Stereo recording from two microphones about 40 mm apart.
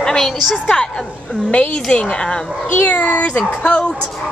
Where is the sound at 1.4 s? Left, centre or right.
Left.